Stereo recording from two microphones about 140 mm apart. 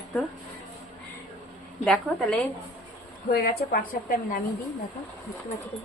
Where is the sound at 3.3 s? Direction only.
90° left.